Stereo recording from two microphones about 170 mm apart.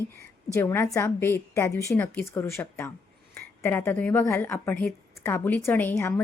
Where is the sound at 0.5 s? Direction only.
15° left (ahead or behind).